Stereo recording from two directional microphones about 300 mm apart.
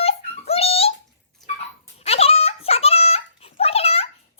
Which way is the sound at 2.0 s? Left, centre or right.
Centre.